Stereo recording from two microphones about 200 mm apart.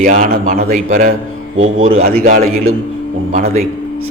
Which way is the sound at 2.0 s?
45° right (ahead or behind).